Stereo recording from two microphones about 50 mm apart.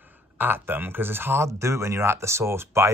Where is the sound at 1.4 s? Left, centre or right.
Right.